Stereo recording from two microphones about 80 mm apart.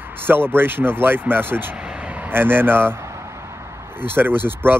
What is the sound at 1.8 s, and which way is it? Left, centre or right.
Vehicle, centre.